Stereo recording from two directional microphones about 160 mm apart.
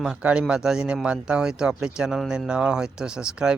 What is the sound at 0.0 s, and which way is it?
Speech, 5° right (ahead or behind).